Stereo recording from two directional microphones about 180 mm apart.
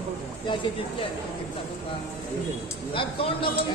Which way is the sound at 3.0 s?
30° left (ahead or behind).